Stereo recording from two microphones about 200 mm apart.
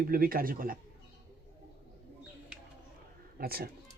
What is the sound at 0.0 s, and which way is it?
Speech, 45° right (ahead or behind).